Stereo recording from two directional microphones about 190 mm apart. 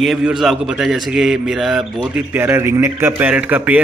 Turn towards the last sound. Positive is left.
turn(degrees=-10)  # may be behind; listen again after turning